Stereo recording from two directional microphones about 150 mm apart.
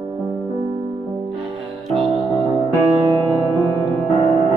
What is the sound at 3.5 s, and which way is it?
Music, 20° left (ahead or behind).